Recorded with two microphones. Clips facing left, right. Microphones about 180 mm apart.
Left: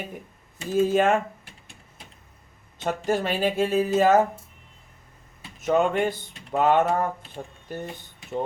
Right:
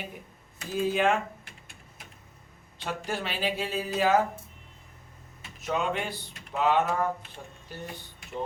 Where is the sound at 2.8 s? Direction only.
45° left (ahead or behind).